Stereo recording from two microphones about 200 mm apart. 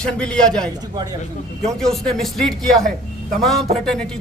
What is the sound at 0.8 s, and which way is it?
Speech, 20° right (ahead or behind).